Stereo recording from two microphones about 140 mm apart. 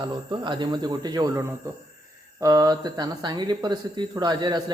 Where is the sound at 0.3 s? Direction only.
35° right (ahead or behind).